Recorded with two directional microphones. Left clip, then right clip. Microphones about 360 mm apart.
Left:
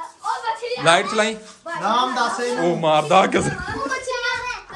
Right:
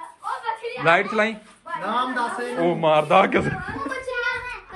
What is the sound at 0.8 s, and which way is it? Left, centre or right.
Speech, centre.